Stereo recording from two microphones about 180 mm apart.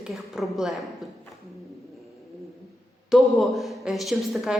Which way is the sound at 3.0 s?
Centre (ahead or behind).